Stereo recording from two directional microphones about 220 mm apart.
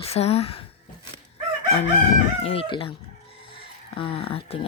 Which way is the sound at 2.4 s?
25° left (ahead or behind).